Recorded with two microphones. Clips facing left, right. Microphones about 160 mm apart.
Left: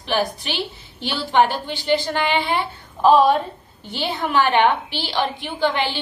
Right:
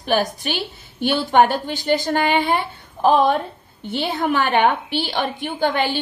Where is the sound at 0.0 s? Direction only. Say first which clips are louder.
Right 2 dB; 45° right (ahead or behind).